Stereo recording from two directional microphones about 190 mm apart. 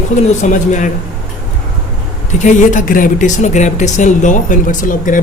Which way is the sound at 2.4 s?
40° left (ahead or behind).